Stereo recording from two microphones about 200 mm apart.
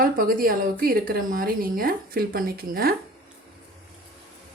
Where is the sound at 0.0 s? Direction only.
45° right (ahead or behind).